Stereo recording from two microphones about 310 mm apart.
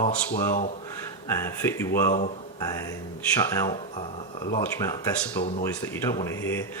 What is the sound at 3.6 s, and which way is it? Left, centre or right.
Speech, centre.